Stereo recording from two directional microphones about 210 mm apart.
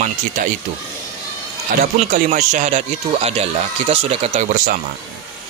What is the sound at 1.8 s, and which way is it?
Speech, 35° right (ahead or behind).